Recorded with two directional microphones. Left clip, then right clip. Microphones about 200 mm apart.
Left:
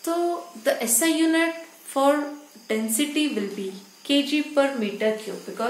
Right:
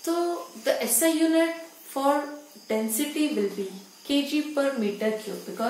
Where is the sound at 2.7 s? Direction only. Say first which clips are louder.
Left 2 dB; 50° left (ahead or behind).